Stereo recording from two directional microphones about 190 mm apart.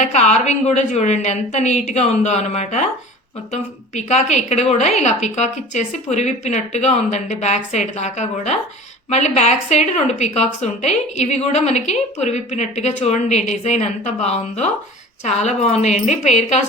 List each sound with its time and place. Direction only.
0.0 s speech: 35° left (ahead or behind)